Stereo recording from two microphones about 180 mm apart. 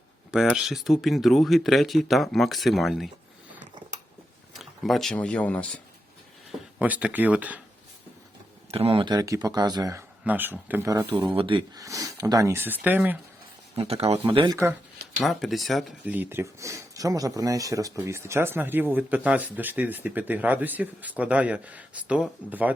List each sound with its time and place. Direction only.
0.3 s speech: 5° right (ahead or behind)
4.5 s speech: centre (ahead or behind)
6.5 s speech: 10° right (ahead or behind)
8.7 s speech: 30° right (ahead or behind)
10.2 s speech: 10° right (ahead or behind)
13.7 s speech: 35° right (ahead or behind); by 14.8 s 20° right (ahead or behind)
15.2 s speech: centre (ahead or behind)
16.1 s speech: 10° right (ahead or behind)